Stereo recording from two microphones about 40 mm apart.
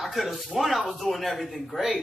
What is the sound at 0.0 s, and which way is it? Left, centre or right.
A man's voice, centre.